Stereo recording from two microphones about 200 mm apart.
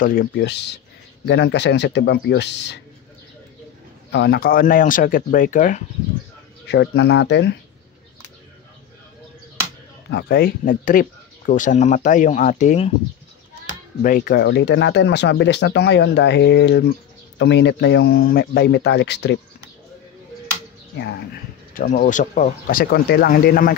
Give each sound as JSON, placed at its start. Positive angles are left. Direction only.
{"t": 0.0, "sound": "speech", "side_deg": 45}
{"t": 0.4, "sound": "speech", "side_deg": 55}
{"t": 4.1, "sound": "speech", "side_deg": 55}
{"t": 6.7, "sound": "speech", "side_deg": 60}
{"t": 10.0, "sound": "speech", "side_deg": 55}
{"t": 14.0, "sound": "speech", "side_deg": 45}
{"t": 20.9, "sound": "speech", "side_deg": 60}
{"t": 21.7, "sound": "speech", "side_deg": 45}